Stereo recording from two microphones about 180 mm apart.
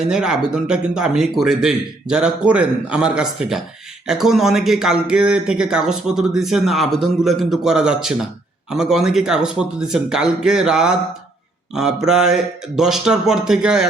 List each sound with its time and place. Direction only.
0.0 s speech: 5° right (ahead or behind)